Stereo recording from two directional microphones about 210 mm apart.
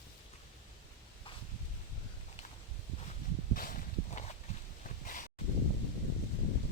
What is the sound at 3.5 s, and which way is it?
Walk, 40° left (ahead or behind).